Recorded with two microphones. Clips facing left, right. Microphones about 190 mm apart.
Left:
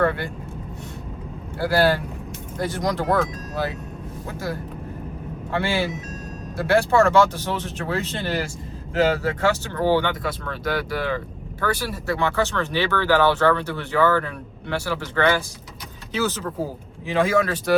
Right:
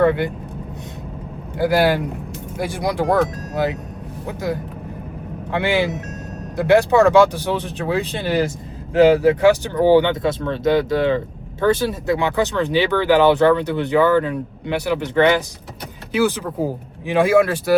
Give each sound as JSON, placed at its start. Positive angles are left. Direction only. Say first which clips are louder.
{"t": 0.0, "sound": "speech", "louder": "right 6 dB", "side_deg": -15}
{"t": 1.5, "sound": "speech", "louder": "right 3 dB", "side_deg": -15}